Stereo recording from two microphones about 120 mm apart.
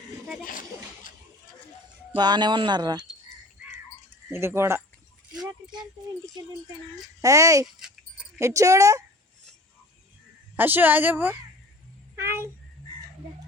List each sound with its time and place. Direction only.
2.1 s speech: 35° right (ahead or behind)
4.3 s speech: 20° right (ahead or behind)
7.2 s speech: 25° right (ahead or behind)
10.6 s a woman's voice: 15° right (ahead or behind)
12.1 s a sound: 20° right (ahead or behind)